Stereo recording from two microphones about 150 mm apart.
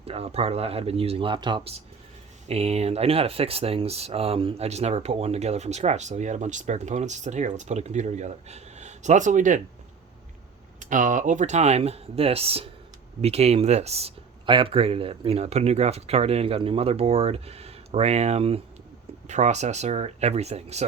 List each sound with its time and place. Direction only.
0.0 s speech: 40° right (ahead or behind)
10.8 s speech: 60° right (ahead or behind)